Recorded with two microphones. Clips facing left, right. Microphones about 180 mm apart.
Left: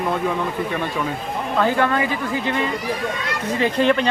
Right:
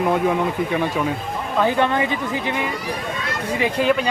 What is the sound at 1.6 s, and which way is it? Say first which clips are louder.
Speech: right 1 dB; 20° right (ahead or behind).